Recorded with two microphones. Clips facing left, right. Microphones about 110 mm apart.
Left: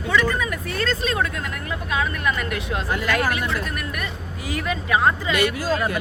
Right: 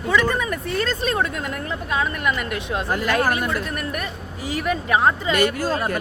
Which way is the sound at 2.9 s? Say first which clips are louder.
Right 2 dB; 35° right (ahead or behind).